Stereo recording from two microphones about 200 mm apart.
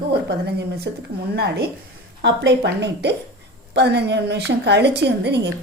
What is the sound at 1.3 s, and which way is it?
A woman's voice, 55° right (ahead or behind).